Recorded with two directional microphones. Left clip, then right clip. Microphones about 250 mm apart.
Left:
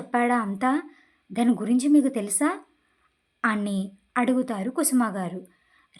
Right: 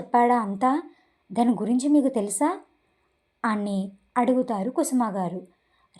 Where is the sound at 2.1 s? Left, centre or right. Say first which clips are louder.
Right 3 dB; centre.